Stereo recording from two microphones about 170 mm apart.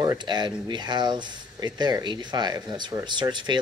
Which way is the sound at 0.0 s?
25° right (ahead or behind).